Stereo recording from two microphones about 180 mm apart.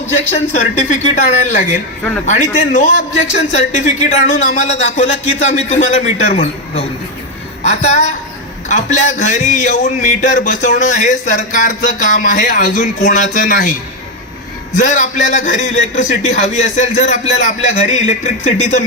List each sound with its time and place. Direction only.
0.5 s a man's voice: 40° left (ahead or behind)
14.8 s a man's voice: 45° left (ahead or behind)